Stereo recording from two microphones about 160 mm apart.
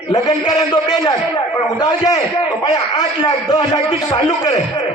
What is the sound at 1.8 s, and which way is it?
A man's voice, 25° left (ahead or behind).